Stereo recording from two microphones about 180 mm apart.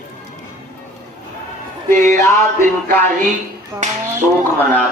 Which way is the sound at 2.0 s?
15° left (ahead or behind).